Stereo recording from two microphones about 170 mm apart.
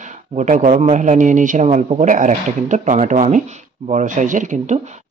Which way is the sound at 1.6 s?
40° right (ahead or behind).